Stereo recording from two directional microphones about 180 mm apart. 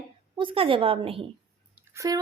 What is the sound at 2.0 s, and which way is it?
Speech, 20° right (ahead or behind).